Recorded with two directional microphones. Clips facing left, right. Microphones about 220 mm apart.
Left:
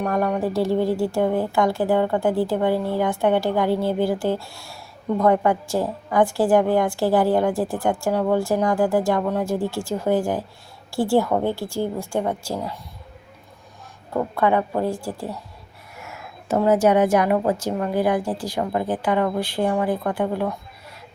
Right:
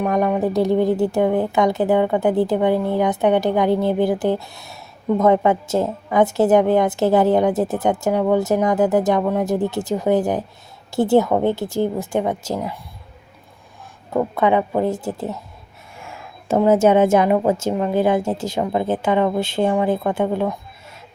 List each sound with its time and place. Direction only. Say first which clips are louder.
0.0 s a woman's voice: right 3 dB; 15° right (ahead or behind)
14.3 s a woman's voice: right 2 dB; 20° right (ahead or behind)